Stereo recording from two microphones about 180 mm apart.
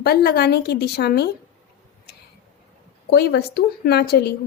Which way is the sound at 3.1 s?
65° left (ahead or behind).